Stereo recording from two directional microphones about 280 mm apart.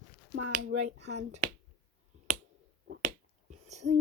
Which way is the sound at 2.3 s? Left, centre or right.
Right.